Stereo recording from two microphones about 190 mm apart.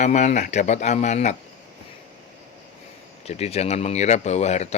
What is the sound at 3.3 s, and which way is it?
A man's voice, 35° left (ahead or behind).